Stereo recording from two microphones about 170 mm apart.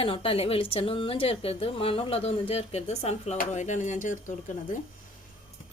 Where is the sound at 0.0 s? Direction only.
30° left (ahead or behind); by 4.2 s 50° left (ahead or behind).